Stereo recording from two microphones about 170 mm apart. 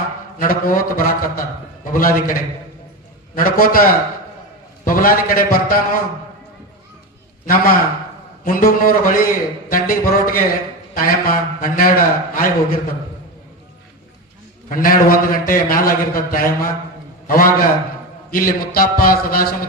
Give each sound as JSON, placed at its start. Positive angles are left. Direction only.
{"t": 0.3, "sound": "a man's voice", "side_deg": 55}
{"t": 4.9, "sound": "a man's voice", "side_deg": 55}
{"t": 7.4, "sound": "a man's voice", "side_deg": 55}
{"t": 14.7, "sound": "a man's voice", "side_deg": 55}